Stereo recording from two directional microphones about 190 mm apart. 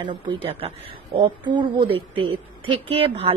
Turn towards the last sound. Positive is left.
turn(degrees=-30)  # may be behind; listen again after turning